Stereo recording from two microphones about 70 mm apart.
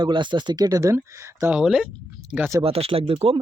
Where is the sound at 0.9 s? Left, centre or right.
Right.